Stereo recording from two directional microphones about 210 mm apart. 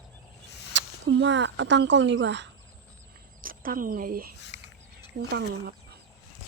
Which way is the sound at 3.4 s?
40° right (ahead or behind).